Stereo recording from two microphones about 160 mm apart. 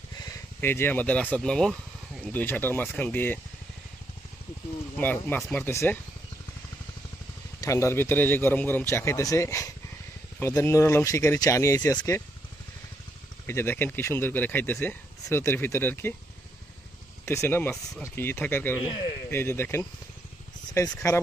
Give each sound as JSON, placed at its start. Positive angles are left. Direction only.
{"t": 0.6, "sound": "speech", "side_deg": 15}
{"t": 4.9, "sound": "speech", "side_deg": 10}
{"t": 7.6, "sound": "speech", "side_deg": 20}
{"t": 13.5, "sound": "speech", "side_deg": 15}
{"t": 17.2, "sound": "speech", "side_deg": 15}
{"t": 18.8, "sound": "speech", "side_deg": 35}
{"t": 19.3, "sound": "speech", "side_deg": 15}